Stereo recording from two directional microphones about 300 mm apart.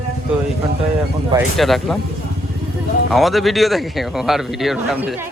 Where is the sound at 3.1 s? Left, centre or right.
Centre.